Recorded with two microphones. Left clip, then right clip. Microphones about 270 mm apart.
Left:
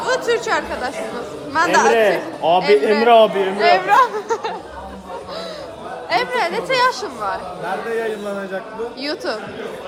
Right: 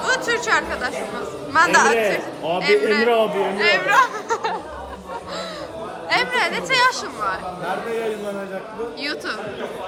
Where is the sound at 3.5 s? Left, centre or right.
Centre.